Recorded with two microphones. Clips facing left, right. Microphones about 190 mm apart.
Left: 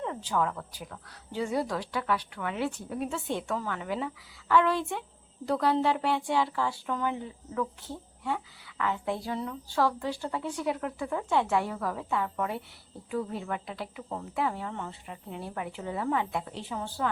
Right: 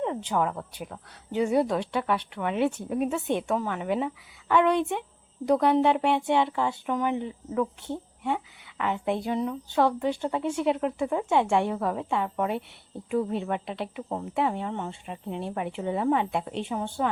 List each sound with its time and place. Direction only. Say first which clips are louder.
0.0 s speech: right 3 dB; 20° right (ahead or behind)